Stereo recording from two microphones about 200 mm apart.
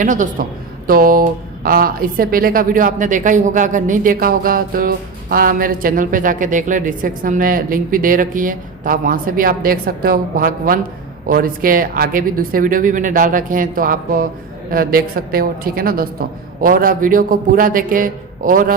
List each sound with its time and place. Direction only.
0.0 s a woman's voice: 40° right (ahead or behind)